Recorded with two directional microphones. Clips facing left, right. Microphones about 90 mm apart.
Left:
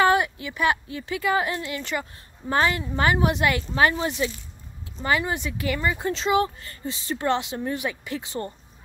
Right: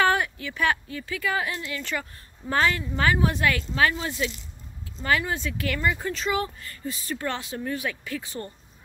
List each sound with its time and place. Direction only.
0.0 s a sound: 15° left (ahead or behind)
0.9 s speech: 25° left (ahead or behind)
6.0 s speech: 25° left (ahead or behind)